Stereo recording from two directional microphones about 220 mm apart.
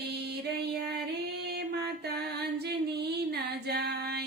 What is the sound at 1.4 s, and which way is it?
Music, 50° right (ahead or behind).